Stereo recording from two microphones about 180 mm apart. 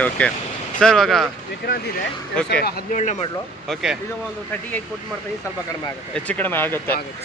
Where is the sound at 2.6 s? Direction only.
45° left (ahead or behind).